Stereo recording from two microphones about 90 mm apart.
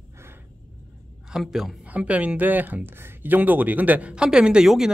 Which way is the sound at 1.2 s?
5° right (ahead or behind).